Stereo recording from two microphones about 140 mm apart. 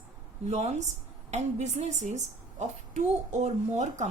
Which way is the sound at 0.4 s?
55° right (ahead or behind).